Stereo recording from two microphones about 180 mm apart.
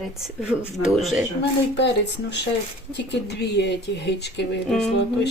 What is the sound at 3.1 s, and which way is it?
Speech, 70° left (ahead or behind).